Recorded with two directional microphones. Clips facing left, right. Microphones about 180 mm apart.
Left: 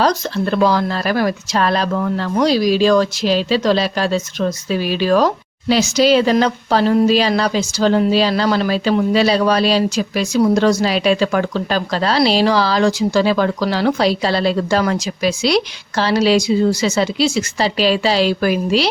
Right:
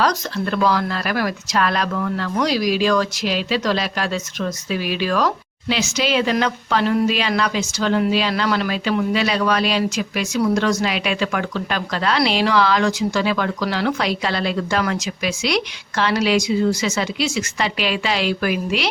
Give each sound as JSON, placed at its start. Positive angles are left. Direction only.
{"t": 0.0, "sound": "speech", "side_deg": 30}